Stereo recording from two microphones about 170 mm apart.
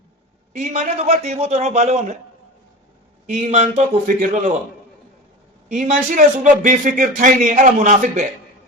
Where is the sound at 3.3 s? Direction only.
40° right (ahead or behind).